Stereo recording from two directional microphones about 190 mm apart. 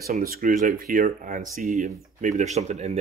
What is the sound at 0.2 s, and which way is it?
Speech, 50° right (ahead or behind).